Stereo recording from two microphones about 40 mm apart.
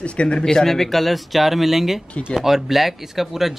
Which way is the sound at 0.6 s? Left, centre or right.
Centre.